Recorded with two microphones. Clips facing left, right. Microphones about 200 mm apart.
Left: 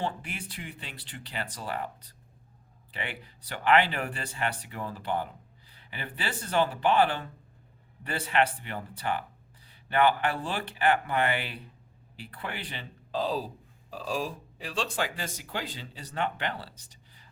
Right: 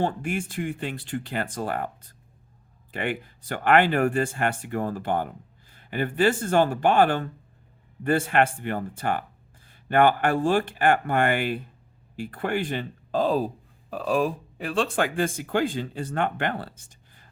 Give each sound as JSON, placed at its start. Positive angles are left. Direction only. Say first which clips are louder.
{"t": 0.0, "sound": "speech", "louder": "right 8 dB", "side_deg": -50}